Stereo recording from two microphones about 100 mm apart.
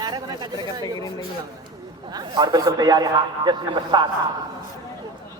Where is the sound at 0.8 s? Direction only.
40° left (ahead or behind).